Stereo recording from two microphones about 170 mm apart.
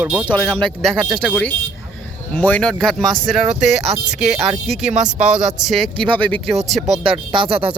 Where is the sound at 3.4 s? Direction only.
40° right (ahead or behind).